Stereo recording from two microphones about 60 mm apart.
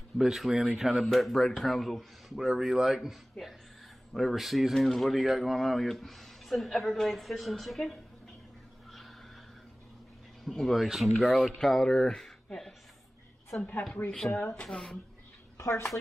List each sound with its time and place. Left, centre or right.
0.2 s speech: centre
10.4 s speech: centre
13.6 s a woman's voice: left
14.7 s speech: centre
15.5 s a sound: left